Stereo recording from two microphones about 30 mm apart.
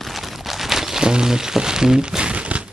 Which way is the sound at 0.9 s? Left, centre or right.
Right.